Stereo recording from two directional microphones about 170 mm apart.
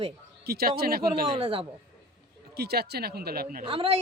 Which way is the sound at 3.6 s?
35° right (ahead or behind).